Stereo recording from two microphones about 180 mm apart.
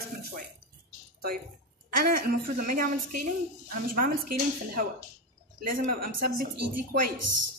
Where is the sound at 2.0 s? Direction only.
50° right (ahead or behind).